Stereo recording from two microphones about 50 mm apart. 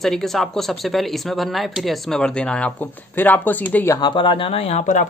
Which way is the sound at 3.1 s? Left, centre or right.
Left.